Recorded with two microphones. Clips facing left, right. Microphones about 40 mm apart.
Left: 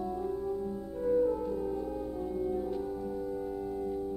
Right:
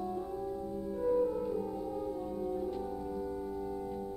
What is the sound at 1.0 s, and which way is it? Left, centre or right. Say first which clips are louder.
French horn: left 3 dB; centre.